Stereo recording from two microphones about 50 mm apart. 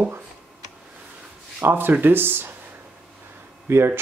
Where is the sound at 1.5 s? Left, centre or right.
Right.